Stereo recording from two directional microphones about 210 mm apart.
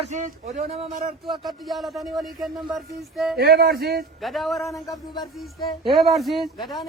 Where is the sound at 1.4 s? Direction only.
Centre (ahead or behind).